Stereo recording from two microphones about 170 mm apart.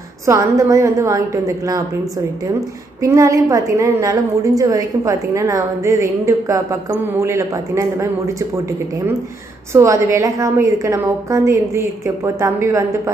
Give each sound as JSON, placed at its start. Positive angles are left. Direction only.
{"t": 0.3, "sound": "a woman's voice", "side_deg": -20}
{"t": 3.0, "sound": "a woman's voice", "side_deg": -20}
{"t": 9.7, "sound": "a woman's voice", "side_deg": -15}